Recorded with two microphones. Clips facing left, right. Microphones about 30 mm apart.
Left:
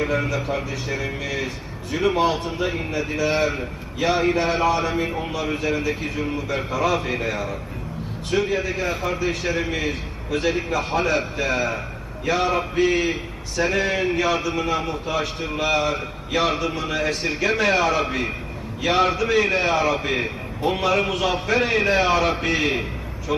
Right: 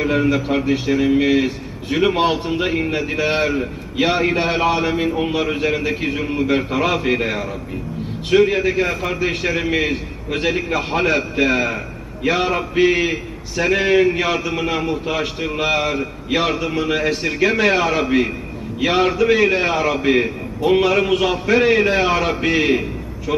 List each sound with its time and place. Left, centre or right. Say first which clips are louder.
0.8 s a man's voice: right 11 dB; right; by 22.8 s centre